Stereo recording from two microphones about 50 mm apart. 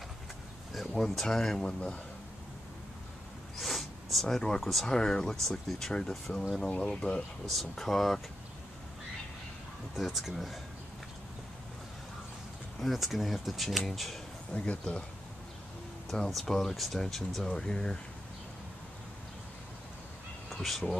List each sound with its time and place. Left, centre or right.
0.7 s speech: centre
3.5 s a sound: centre
4.6 s speech: centre
4.8 s speech: centre
7.7 s speech: centre
9.9 s speech: centre
12.8 s speech: centre
14.5 s speech: left
16.3 s speech: centre
20.4 s speech: centre